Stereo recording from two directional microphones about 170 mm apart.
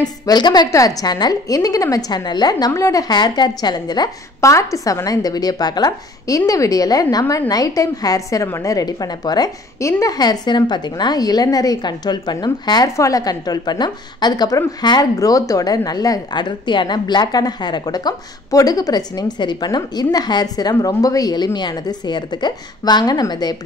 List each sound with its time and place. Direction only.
0.0 s a woman's voice: 25° left (ahead or behind)